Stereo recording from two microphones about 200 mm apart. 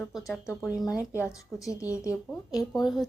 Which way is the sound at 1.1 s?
15° left (ahead or behind).